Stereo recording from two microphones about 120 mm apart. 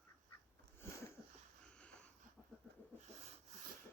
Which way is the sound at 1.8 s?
10° left (ahead or behind).